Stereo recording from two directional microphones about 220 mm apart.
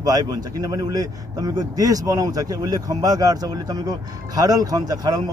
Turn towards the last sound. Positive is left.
turn(degrees=-15)  # may be behind; listen again after turning